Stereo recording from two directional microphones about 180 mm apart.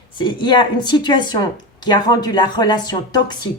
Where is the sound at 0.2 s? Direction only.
25° left (ahead or behind).